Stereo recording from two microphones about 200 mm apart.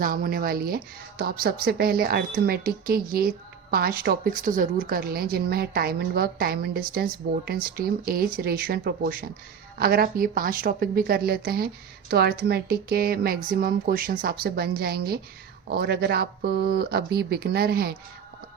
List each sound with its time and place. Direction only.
0.0 s speech: 45° right (ahead or behind)